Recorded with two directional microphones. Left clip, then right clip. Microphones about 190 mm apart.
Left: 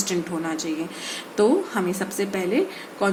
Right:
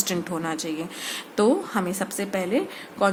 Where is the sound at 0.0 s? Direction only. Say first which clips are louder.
Left 1 dB; 45° right (ahead or behind).